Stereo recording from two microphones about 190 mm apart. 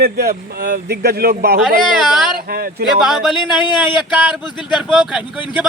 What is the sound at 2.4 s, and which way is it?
Speech, 50° right (ahead or behind).